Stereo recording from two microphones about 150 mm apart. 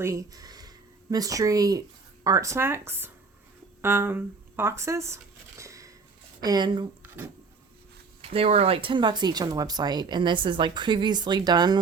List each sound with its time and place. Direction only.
0.0 s speech: 20° right (ahead or behind)
8.2 s speech: 40° right (ahead or behind)